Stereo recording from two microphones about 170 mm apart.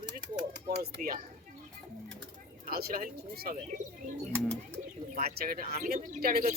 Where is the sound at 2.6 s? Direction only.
60° right (ahead or behind).